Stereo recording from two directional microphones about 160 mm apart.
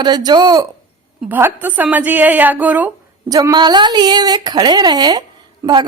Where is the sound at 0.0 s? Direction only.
25° right (ahead or behind).